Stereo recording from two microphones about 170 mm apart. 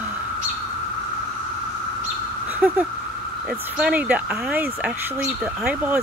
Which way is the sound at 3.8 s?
10° right (ahead or behind).